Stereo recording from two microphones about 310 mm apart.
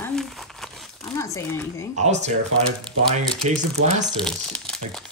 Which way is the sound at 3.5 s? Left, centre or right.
Right.